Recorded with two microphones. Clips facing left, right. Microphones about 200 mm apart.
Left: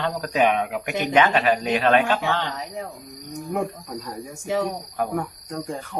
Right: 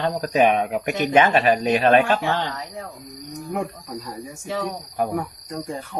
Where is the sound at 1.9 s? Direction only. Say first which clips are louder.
Right 2 dB; 40° right (ahead or behind).